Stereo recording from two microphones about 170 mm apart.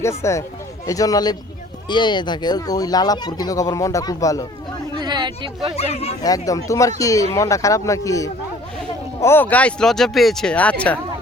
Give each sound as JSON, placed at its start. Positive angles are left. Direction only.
{"t": 0.0, "sound": "speech", "side_deg": 15}
{"t": 4.9, "sound": "a sound", "side_deg": -25}
{"t": 5.7, "sound": "speech", "side_deg": 35}
{"t": 6.2, "sound": "speech", "side_deg": 20}